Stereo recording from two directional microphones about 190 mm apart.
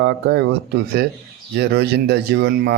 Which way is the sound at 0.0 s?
65° right (ahead or behind).